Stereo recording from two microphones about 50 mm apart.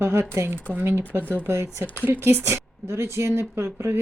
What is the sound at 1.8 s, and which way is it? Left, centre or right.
Speech, left.